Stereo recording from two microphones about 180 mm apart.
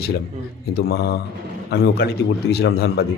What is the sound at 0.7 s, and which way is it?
A man's voice, 60° left (ahead or behind).